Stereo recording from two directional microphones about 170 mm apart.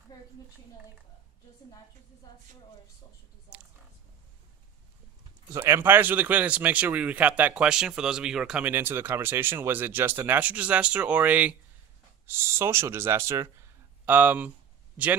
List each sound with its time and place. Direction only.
0.1 s a woman's voice: 25° left (ahead or behind)
5.5 s speech: 15° right (ahead or behind)